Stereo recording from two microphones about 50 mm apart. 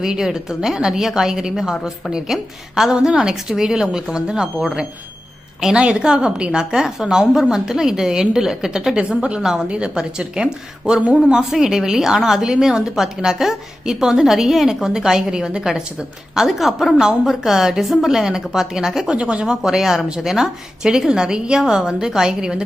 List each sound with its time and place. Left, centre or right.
0.0 s a woman's voice: centre
9.0 s a woman's voice: right
19.1 s a woman's voice: right